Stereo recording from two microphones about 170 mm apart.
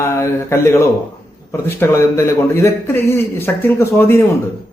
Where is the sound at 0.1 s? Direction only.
15° left (ahead or behind).